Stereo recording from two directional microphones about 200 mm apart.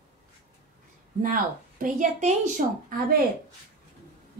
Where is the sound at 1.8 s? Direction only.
35° right (ahead or behind).